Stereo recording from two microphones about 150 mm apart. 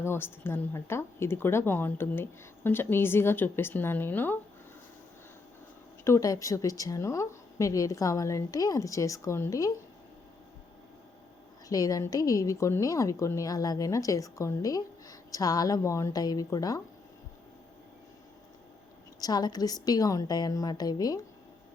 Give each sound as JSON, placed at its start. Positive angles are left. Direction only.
{"t": 0.0, "sound": "speech", "side_deg": 15}
{"t": 6.1, "sound": "a woman's voice", "side_deg": 20}
{"t": 11.7, "sound": "a woman's voice", "side_deg": 25}
{"t": 19.2, "sound": "a woman's voice", "side_deg": 25}